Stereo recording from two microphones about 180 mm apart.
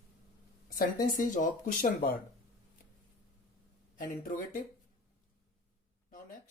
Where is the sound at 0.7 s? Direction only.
50° left (ahead or behind).